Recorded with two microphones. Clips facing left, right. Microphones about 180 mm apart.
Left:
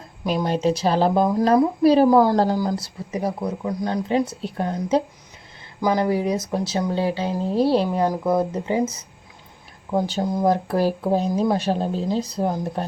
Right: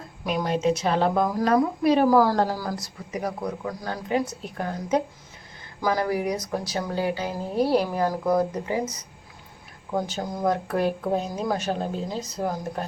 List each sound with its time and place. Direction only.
0.4 s speech: 35° left (ahead or behind)